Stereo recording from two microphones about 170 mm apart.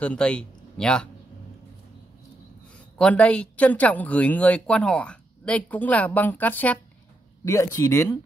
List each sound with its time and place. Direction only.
0.0 s speech: 5° left (ahead or behind)
3.0 s speech: 5° left (ahead or behind)